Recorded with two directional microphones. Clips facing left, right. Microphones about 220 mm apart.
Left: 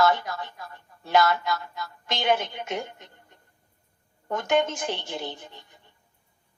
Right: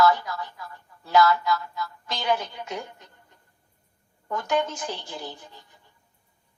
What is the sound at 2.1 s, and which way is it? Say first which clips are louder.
Speech: left 2 dB; 20° left (ahead or behind).